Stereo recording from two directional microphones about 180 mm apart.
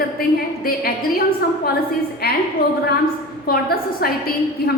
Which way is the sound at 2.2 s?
60° left (ahead or behind).